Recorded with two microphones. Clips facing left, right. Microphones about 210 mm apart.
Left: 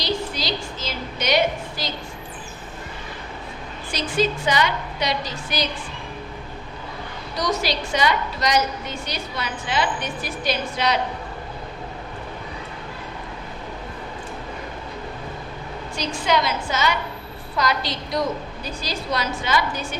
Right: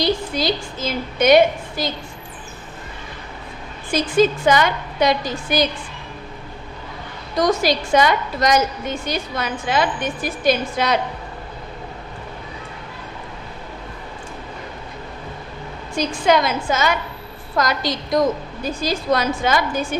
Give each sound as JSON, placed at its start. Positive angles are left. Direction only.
{"t": 0.0, "sound": "a woman's voice", "side_deg": -50}
{"t": 3.9, "sound": "a woman's voice", "side_deg": -50}
{"t": 7.3, "sound": "a woman's voice", "side_deg": -50}
{"t": 16.0, "sound": "a woman's voice", "side_deg": -50}